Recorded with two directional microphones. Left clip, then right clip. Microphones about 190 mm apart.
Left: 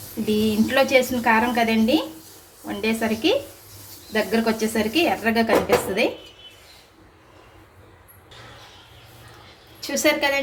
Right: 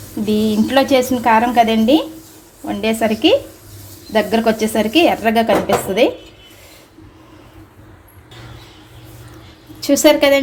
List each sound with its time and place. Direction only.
0.3 s a woman's voice: 35° right (ahead or behind)
9.8 s a woman's voice: 50° right (ahead or behind)